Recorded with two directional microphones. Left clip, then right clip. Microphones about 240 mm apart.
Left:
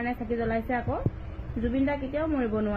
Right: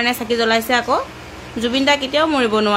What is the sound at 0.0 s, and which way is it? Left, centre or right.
Speech, right.